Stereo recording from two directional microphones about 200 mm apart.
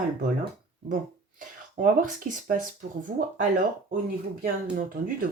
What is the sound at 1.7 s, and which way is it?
Speech, 40° right (ahead or behind).